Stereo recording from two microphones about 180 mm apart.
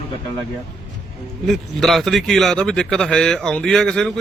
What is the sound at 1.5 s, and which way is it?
A man's voice, centre (ahead or behind).